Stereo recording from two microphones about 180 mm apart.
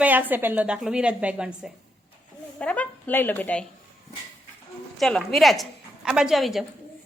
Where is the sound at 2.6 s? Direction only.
10° left (ahead or behind).